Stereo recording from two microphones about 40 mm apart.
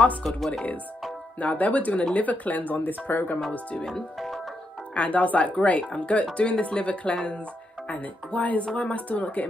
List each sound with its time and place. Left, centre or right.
1.4 s speech: left
4.9 s speech: left